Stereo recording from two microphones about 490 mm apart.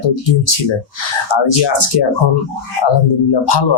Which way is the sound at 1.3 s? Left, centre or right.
Left.